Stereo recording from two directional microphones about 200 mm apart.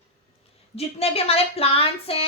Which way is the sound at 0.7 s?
30° left (ahead or behind).